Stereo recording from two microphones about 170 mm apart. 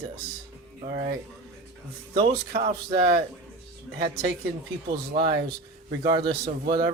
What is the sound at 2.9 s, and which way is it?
A man's voice, 65° right (ahead or behind).